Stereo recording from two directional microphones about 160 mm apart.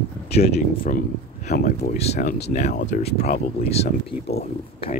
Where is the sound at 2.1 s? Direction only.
80° left.